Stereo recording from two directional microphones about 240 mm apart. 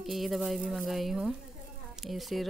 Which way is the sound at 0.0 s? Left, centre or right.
Centre.